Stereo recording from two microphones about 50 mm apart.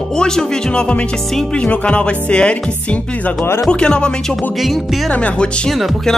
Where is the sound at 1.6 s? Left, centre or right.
Left.